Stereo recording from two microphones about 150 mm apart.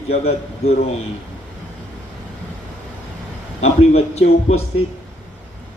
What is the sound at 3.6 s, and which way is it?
A man's voice, 45° left (ahead or behind).